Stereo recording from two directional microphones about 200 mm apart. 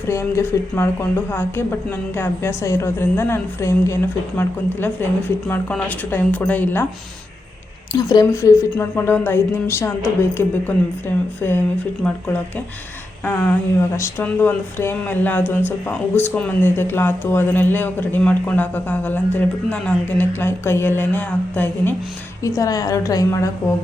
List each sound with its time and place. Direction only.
0.1 s speech: 10° left (ahead or behind)
7.9 s speech: 20° left (ahead or behind)